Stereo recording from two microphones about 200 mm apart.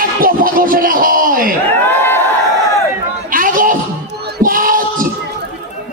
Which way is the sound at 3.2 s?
45° right (ahead or behind).